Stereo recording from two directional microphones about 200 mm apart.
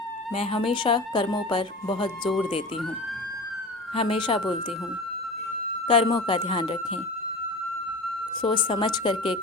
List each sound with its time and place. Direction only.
0.3 s speech: 30° left (ahead or behind)
3.9 s speech: 30° left (ahead or behind)
5.9 s speech: 25° left (ahead or behind)
8.4 s speech: 25° left (ahead or behind)